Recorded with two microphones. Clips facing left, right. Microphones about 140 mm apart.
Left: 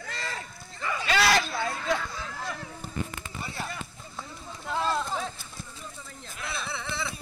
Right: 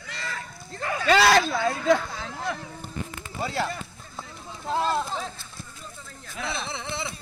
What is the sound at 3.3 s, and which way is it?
Speech, 90° right.